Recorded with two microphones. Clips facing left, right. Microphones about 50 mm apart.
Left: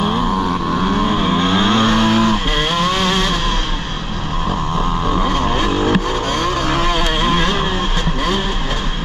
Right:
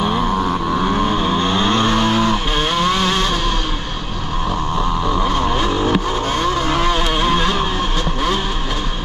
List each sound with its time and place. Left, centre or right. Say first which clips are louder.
0.0 s vehicle: even; centre
4.7 s vehicle: even; centre